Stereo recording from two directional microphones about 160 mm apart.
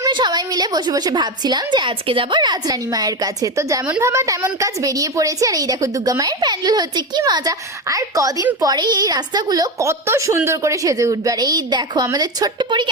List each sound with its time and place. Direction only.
0.0 s a woman's voice: 25° right (ahead or behind)